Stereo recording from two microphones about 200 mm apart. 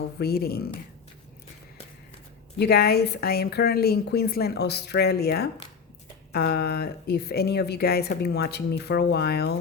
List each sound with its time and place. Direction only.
0.2 s speech: 50° left (ahead or behind)
2.6 s speech: 55° left (ahead or behind)